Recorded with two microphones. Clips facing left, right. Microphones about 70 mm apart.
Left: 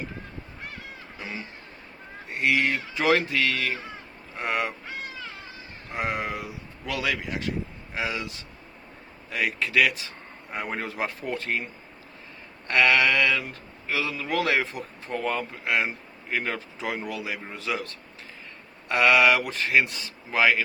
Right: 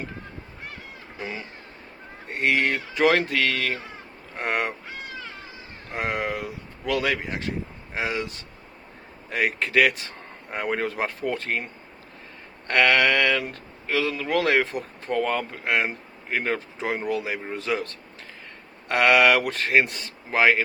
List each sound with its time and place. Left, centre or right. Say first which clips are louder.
2.3 s speech: right 1 dB; right
5.9 s speech: right 2 dB; right
12.6 s speech: right 1 dB; right